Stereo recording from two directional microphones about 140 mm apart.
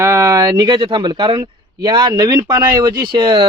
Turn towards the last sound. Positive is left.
turn(degrees=-35)  # may be behind; listen again after turning